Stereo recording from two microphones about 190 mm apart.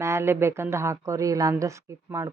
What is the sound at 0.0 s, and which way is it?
Speech, 15° right (ahead or behind).